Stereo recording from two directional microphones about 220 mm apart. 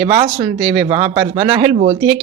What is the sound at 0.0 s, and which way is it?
Speech, 25° right (ahead or behind).